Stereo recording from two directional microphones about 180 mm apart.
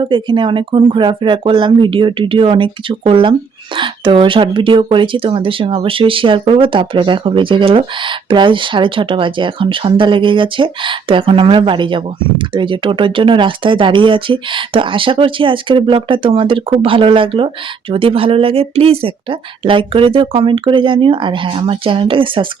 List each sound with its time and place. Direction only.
0.0 s speech: 25° right (ahead or behind)